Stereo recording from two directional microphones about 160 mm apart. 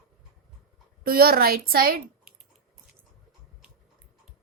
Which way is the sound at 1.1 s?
70° right (ahead or behind).